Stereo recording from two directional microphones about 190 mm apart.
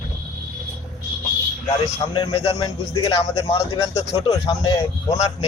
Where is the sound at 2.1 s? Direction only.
30° left (ahead or behind).